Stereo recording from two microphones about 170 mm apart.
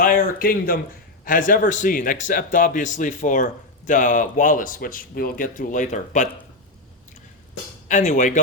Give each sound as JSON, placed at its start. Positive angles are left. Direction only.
{"t": 0.0, "sound": "speech", "side_deg": 55}
{"t": 7.9, "sound": "speech", "side_deg": 45}